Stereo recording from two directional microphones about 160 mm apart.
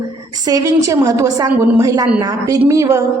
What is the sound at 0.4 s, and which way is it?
A woman's voice, 20° right (ahead or behind).